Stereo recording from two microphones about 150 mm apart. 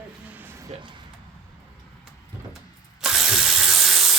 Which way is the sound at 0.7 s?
35° right (ahead or behind).